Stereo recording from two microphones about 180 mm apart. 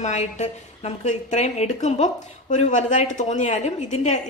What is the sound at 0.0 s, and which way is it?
A woman's voice, 40° left (ahead or behind).